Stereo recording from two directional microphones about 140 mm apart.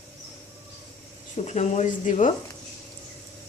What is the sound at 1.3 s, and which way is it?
Speech, 55° left (ahead or behind).